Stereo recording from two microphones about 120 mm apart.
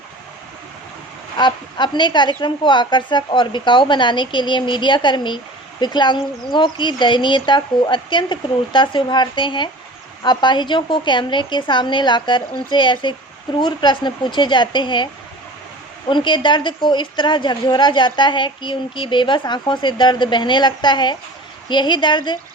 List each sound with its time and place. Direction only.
1.4 s a woman's voice: 40° left (ahead or behind)